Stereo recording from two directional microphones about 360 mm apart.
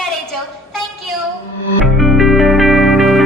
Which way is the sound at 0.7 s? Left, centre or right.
Centre.